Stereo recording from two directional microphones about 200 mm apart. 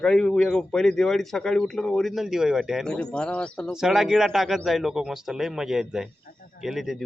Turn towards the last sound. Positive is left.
turn(degrees=0)  # may be behind; listen again after turning